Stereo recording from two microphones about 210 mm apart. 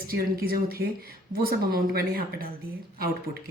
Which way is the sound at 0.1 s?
45° right (ahead or behind).